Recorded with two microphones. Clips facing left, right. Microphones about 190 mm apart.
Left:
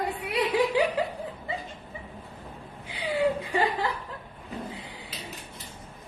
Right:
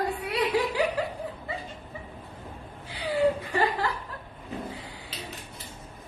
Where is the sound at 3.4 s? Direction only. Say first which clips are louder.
Even; 20° left (ahead or behind).